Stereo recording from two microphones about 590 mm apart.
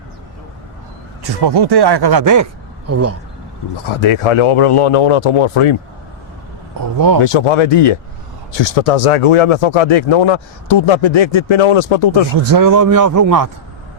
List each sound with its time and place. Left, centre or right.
1.2 s speech: right
3.8 s speech: left
6.7 s a man's voice: right
7.3 s speech: left
12.4 s a man's voice: right